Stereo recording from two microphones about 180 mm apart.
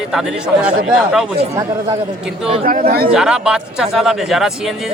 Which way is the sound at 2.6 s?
50° right (ahead or behind).